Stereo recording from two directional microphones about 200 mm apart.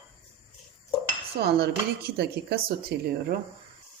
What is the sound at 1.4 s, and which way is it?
Speech, 55° right (ahead or behind).